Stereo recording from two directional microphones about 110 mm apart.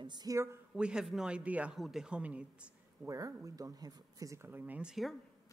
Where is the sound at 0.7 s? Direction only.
5° right (ahead or behind).